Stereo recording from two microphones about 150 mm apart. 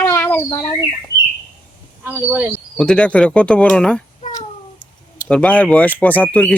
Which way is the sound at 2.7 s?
5° left (ahead or behind).